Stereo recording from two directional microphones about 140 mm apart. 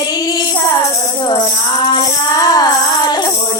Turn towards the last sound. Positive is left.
turn(degrees=30)  # may be behind; listen again after turning